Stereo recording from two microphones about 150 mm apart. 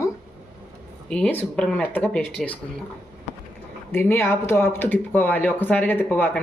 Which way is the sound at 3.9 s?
15° left (ahead or behind).